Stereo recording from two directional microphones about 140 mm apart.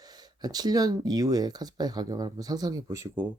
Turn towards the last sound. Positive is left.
turn(degrees=-25)  # may be behind; listen again after turning